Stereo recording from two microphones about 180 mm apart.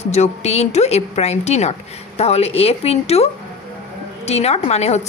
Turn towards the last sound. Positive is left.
turn(degrees=35)  # may be behind; listen again after turning